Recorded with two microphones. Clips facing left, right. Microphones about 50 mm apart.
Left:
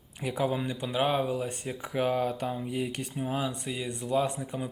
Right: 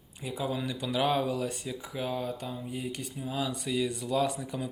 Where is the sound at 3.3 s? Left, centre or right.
Left.